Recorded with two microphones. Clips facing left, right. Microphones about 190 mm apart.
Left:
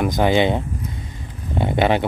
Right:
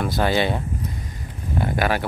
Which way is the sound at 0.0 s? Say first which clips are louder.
Left 4 dB; 15° left (ahead or behind).